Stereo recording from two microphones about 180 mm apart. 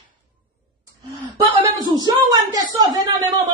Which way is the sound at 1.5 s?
25° right (ahead or behind).